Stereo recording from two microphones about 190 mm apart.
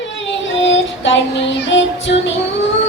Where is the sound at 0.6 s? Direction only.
75° left (ahead or behind).